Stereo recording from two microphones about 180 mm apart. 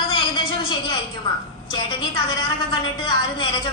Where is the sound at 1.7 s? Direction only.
25° left (ahead or behind).